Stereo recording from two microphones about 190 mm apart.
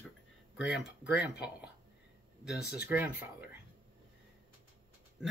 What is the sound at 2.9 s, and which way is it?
Speech, 10° right (ahead or behind).